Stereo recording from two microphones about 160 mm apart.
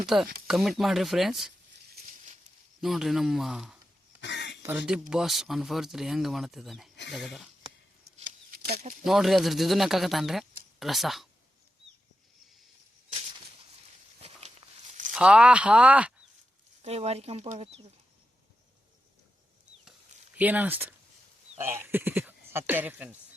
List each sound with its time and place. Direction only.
0.0 s speech: 5° right (ahead or behind)
2.8 s speech: centre (ahead or behind)
4.2 s a sound: 90° left
4.6 s speech: 10° right (ahead or behind)
8.2 s a sound: 70° right (ahead or behind)
8.7 s speech: 45° right (ahead or behind)
9.0 s speech: centre (ahead or behind)
14.2 s walk: 40° right (ahead or behind)
15.1 s speech: 5° right (ahead or behind)
16.8 s speech: 40° right (ahead or behind)
20.3 s speech: 10° right (ahead or behind)